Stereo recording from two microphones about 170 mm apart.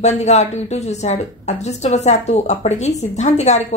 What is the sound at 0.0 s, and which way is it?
A woman's voice, 40° left (ahead or behind).